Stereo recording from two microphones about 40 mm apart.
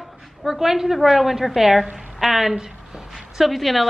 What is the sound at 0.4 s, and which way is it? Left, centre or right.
A woman's voice, centre.